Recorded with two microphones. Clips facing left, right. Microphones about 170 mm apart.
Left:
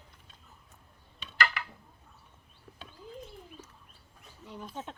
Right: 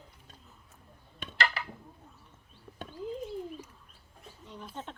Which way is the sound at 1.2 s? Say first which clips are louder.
Right 6 dB; 50° right (ahead or behind).